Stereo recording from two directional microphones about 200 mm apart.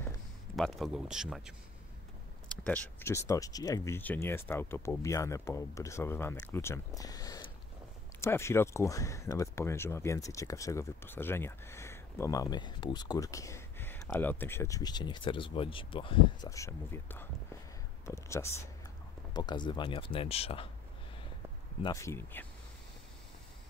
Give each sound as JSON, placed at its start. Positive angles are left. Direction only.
{"t": 0.6, "sound": "speech", "side_deg": 0}
{"t": 21.8, "sound": "speech", "side_deg": 15}